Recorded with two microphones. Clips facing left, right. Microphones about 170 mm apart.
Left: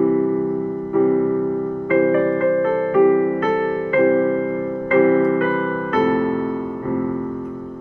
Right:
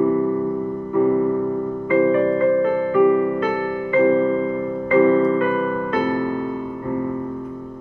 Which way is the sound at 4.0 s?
25° right (ahead or behind).